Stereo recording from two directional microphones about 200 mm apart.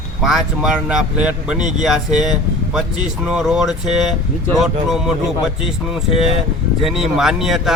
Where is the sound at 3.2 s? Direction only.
Centre (ahead or behind).